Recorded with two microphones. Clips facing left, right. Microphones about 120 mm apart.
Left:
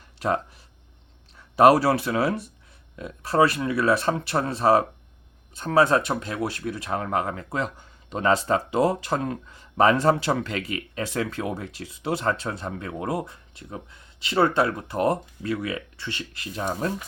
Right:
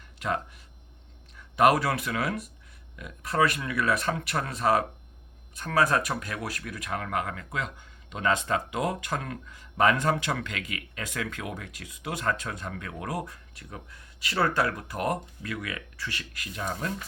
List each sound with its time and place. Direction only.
0.2 s speech: 35° left (ahead or behind)